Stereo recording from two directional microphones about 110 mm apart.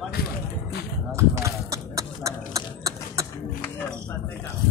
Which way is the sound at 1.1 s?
25° right (ahead or behind).